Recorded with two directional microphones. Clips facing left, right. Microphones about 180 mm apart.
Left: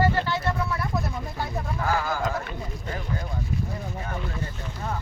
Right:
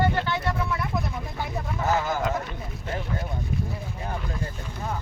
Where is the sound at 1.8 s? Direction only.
20° right (ahead or behind).